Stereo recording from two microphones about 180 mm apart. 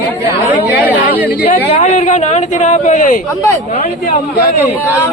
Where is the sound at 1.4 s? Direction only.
35° left (ahead or behind).